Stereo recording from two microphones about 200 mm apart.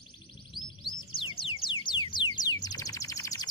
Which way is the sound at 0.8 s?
25° left (ahead or behind).